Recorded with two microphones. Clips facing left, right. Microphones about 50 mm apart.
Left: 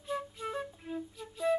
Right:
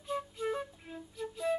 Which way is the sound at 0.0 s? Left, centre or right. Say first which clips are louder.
Right 1 dB; centre.